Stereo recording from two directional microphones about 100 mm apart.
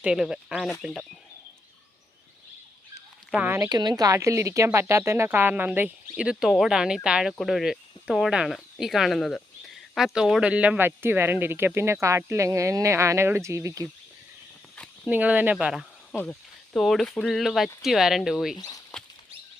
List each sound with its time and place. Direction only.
0.0 s speech: 5° right (ahead or behind)
3.3 s speech: 15° right (ahead or behind)
3.7 s speech: 45° right (ahead or behind)
15.1 s speech: 15° right (ahead or behind)
18.5 s speech: 40° left (ahead or behind)